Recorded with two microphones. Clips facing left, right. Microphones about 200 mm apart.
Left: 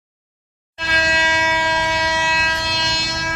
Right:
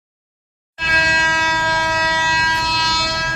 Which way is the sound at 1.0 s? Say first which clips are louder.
Left 2 dB; 25° left (ahead or behind).